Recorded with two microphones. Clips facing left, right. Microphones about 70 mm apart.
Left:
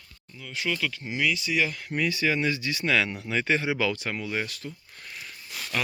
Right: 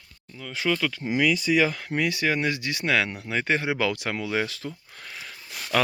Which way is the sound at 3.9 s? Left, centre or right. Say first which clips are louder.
Right 3 dB; right.